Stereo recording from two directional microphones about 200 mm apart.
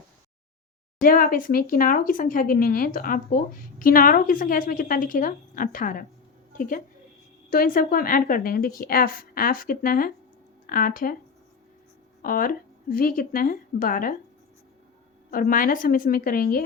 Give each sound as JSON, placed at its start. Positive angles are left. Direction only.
{"t": 1.0, "sound": "speech", "side_deg": 45}
{"t": 12.2, "sound": "speech", "side_deg": 45}
{"t": 15.3, "sound": "speech", "side_deg": 45}